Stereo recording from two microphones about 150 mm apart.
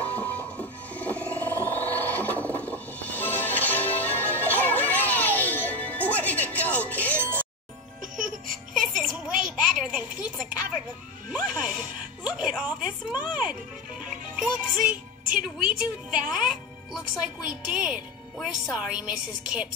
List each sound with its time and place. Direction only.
0.0 s music: 10° left (ahead or behind)
8.0 s music: 60° right (ahead or behind)
8.8 s music: 5° right (ahead or behind)
9.6 s a sound: 5° right (ahead or behind)
12.2 s music: 10° right (ahead or behind)
16.1 s music: 5° right (ahead or behind)